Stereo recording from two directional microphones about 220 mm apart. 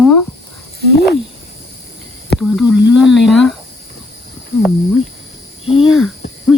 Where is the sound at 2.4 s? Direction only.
Centre (ahead or behind).